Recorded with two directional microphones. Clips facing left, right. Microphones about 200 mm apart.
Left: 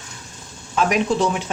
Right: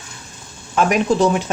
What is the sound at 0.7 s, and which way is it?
Speech, 45° right (ahead or behind).